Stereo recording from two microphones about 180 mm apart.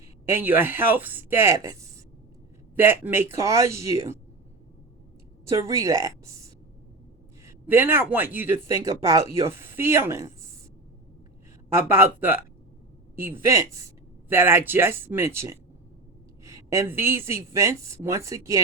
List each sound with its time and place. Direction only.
0.3 s speech: 10° right (ahead or behind)
2.7 s speech: 10° right (ahead or behind)
5.5 s speech: 15° right (ahead or behind)
11.7 s speech: 10° right (ahead or behind)